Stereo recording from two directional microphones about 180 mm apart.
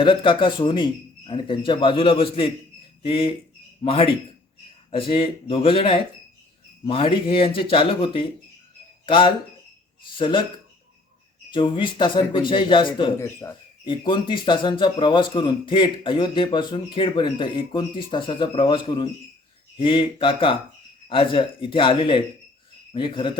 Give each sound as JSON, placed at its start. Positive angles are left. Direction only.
{"t": 0.0, "sound": "speech", "side_deg": 30}
{"t": 11.5, "sound": "speech", "side_deg": 25}
{"t": 13.1, "sound": "speech", "side_deg": 15}
{"t": 13.8, "sound": "speech", "side_deg": 25}